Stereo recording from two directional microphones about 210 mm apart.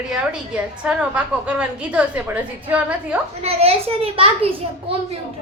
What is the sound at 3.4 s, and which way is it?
A child's voice, 30° right (ahead or behind).